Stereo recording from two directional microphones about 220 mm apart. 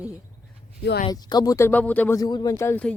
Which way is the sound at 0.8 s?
50° left (ahead or behind).